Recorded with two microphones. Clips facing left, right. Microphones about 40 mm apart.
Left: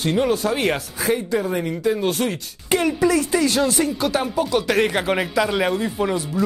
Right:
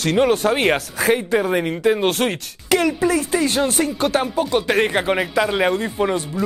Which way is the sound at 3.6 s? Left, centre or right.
Right.